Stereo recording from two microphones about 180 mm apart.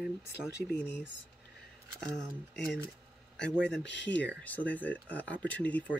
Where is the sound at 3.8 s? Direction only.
80° left.